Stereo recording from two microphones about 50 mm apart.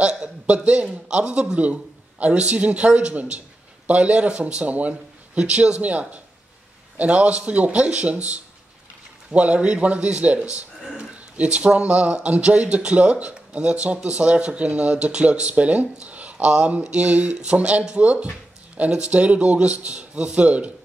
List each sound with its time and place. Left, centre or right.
0.0 s speech: right